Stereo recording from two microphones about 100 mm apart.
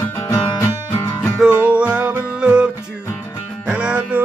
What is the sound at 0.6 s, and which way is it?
Music, 20° left (ahead or behind).